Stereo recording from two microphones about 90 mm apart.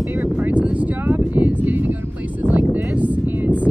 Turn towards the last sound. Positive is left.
turn(degrees=-20)  # may be behind; listen again after turning